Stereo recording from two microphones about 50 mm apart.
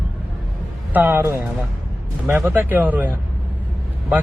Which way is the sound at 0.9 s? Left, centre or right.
Right.